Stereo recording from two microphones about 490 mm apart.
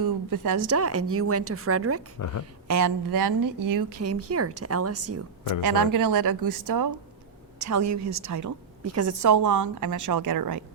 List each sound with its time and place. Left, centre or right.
0.0 s speech: right
2.1 s speech: left
2.4 s speech: right
5.7 s a woman's voice: right